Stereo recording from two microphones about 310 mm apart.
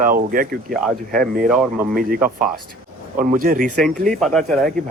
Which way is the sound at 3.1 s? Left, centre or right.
Right.